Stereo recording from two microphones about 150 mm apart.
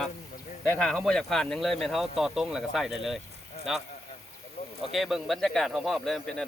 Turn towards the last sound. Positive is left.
turn(degrees=0)  # may be behind; listen again after turning